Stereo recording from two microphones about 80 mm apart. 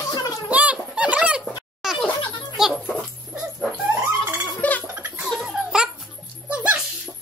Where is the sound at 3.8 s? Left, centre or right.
Right.